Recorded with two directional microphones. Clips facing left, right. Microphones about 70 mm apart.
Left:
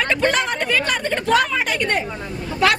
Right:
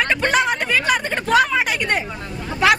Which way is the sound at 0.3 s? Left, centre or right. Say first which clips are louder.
Right 1 dB; centre.